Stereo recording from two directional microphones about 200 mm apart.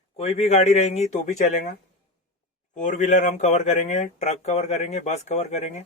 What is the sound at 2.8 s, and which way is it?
Speech, 40° left (ahead or behind).